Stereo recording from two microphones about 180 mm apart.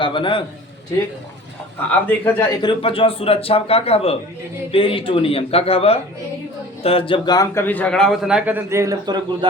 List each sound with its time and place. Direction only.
0.0 s a man's voice: 25° left (ahead or behind)
1.9 s a man's voice: 10° left (ahead or behind)
2.6 s a man's voice: 30° left (ahead or behind); by 9.5 s 25° right (ahead or behind)